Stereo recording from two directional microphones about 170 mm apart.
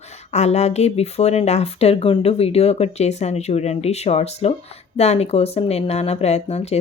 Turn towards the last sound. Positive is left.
turn(degrees=40)  # may be behind; listen again after turning